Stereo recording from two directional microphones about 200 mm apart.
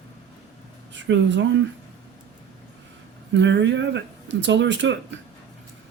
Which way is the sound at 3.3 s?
65° right (ahead or behind).